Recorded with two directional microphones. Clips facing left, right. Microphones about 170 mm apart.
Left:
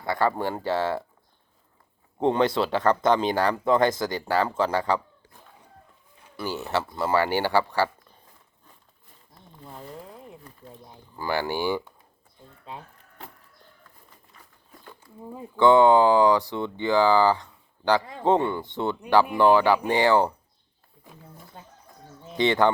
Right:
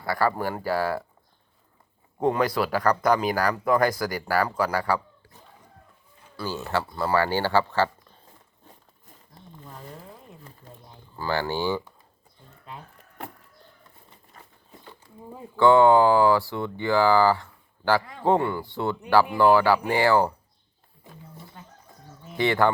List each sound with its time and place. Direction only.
0.0 s speech: 20° left (ahead or behind)
2.2 s speech: 25° left (ahead or behind)
6.3 s speech: 20° left (ahead or behind)
11.2 s speech: 15° left (ahead or behind)
14.3 s a sound: 45° right (ahead or behind)
15.5 s speech: 20° left (ahead or behind)
22.2 s speech: 20° left (ahead or behind)